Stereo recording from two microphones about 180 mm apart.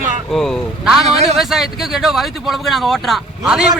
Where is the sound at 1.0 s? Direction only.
35° right (ahead or behind).